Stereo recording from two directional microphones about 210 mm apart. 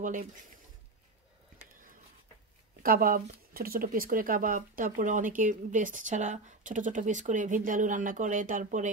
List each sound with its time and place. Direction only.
0.0 s speech: 40° right (ahead or behind)
2.8 s speech: 45° right (ahead or behind)